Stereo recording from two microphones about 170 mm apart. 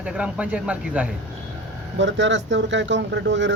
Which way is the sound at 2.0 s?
90° right.